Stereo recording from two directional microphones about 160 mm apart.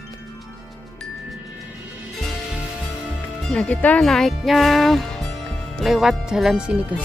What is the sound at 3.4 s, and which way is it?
Speech, 5° left (ahead or behind).